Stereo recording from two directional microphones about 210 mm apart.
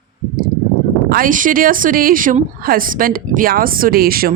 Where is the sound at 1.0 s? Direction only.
45° right (ahead or behind).